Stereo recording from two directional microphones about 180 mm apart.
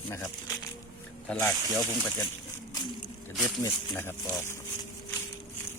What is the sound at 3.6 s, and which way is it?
Speech, 15° left (ahead or behind).